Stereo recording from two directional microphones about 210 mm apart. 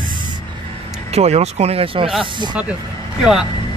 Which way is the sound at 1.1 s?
30° right (ahead or behind).